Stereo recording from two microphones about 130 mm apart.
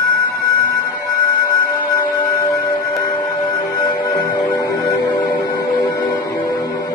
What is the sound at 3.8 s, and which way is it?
Music, 35° left (ahead or behind).